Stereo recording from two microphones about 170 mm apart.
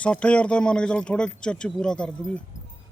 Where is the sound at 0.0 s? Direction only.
5° left (ahead or behind).